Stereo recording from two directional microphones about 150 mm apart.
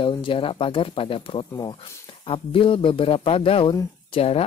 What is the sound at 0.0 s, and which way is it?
Speech, 35° left (ahead or behind).